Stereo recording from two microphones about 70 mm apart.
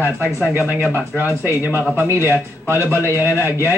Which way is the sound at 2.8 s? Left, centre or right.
Left.